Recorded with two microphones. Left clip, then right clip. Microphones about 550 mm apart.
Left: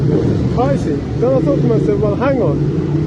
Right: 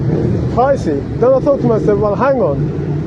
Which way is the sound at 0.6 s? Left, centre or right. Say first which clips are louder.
Right 5 dB; right.